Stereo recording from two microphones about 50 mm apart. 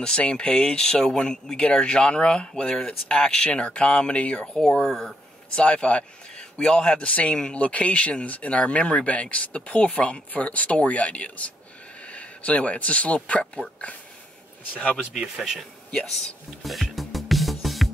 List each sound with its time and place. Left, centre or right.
0.0 s speech: centre
4.8 s speech: centre
5.5 s speech: centre
15.3 s speech: centre
15.9 s speech: centre
16.6 s music: centre